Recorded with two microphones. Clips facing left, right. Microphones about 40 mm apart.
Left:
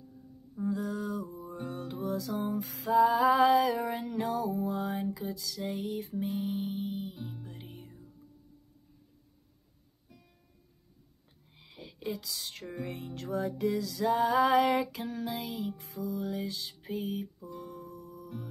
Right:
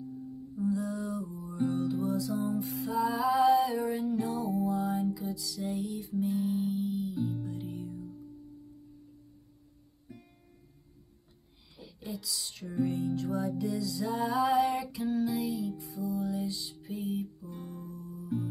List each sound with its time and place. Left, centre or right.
0.6 s music: left
11.7 s music: left
17.5 s music: right
17.8 s music: left